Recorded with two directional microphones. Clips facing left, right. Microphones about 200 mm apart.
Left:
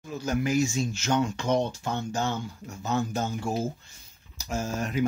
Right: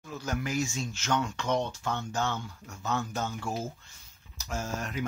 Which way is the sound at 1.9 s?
35° left (ahead or behind).